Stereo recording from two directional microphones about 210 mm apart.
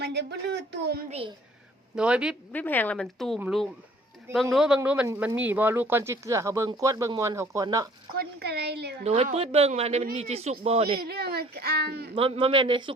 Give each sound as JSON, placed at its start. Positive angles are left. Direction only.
{"t": 0.0, "sound": "a child's voice", "side_deg": -55}
{"t": 2.0, "sound": "a woman's voice", "side_deg": -5}
{"t": 2.5, "sound": "a woman's voice", "side_deg": 10}
{"t": 8.1, "sound": "a child's voice", "side_deg": -50}
{"t": 9.0, "sound": "a man's voice", "side_deg": -30}
{"t": 11.0, "sound": "a child's voice", "side_deg": -50}
{"t": 12.1, "sound": "a man's voice", "side_deg": -25}